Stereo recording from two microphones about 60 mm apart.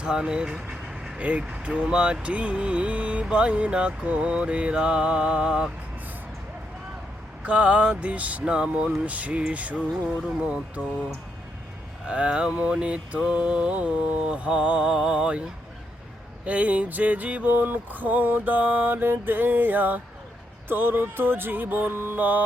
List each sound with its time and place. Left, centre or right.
0.0 s vehicle: centre
1.2 s speech: right
7.4 s speech: right
12.0 s mantra: centre
16.5 s speech: right
20.7 s music: right